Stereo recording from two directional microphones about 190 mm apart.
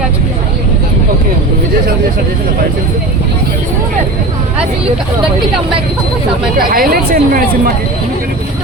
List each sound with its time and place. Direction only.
6.6 s speech: 50° right (ahead or behind)